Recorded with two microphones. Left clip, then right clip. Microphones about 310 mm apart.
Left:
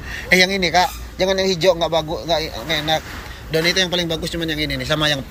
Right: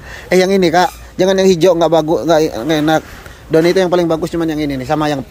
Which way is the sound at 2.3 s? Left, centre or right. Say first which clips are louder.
Right 8 dB; right.